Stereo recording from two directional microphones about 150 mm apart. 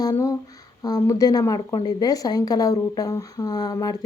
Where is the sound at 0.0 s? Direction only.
20° left (ahead or behind).